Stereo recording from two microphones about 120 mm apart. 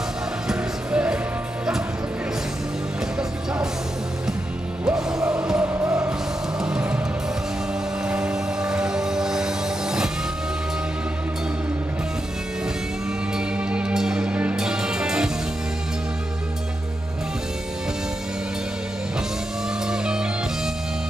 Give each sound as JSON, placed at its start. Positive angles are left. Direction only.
{"t": 0.5, "sound": "music", "side_deg": -10}
{"t": 4.8, "sound": "music", "side_deg": -5}
{"t": 5.8, "sound": "music", "side_deg": -25}
{"t": 6.6, "sound": "music", "side_deg": -10}
{"t": 8.1, "sound": "music", "side_deg": -10}
{"t": 13.6, "sound": "music", "side_deg": -10}
{"t": 19.9, "sound": "music", "side_deg": -5}